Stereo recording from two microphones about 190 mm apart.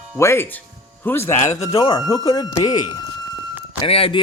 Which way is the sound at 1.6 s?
25° left (ahead or behind).